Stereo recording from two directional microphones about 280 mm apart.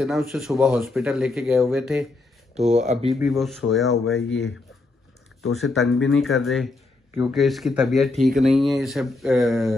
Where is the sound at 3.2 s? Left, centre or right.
Centre.